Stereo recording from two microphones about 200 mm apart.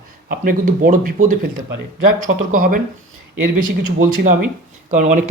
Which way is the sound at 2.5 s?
45° right (ahead or behind).